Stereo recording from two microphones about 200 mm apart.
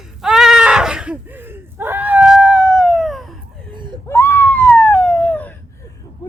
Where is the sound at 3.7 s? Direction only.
25° right (ahead or behind).